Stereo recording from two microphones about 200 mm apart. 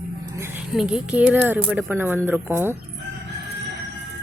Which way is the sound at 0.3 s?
10° right (ahead or behind).